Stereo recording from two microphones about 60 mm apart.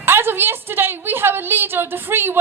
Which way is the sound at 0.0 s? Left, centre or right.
Right.